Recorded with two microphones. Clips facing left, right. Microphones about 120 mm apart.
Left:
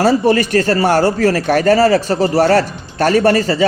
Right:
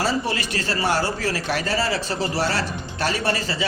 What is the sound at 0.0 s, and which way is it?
A man's voice, 50° left (ahead or behind).